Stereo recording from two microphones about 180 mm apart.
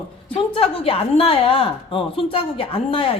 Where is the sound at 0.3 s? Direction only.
30° left (ahead or behind).